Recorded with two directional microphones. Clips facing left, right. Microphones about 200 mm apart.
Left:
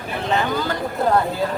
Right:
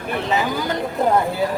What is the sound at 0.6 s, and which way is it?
Speech, 15° right (ahead or behind).